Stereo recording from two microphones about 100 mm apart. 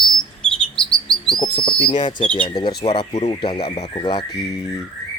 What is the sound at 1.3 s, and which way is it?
Speech, 50° left (ahead or behind).